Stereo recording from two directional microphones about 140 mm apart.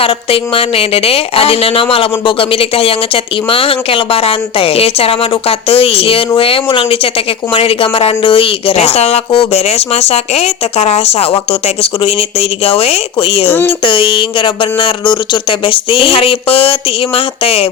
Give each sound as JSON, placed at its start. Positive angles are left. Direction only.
{"t": 0.0, "sound": "speech", "side_deg": 40}
{"t": 13.5, "sound": "speech", "side_deg": 15}
{"t": 13.8, "sound": "speech", "side_deg": 40}